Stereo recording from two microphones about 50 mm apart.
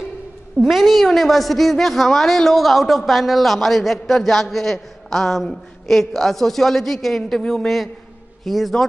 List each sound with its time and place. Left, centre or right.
0.7 s a woman's voice: centre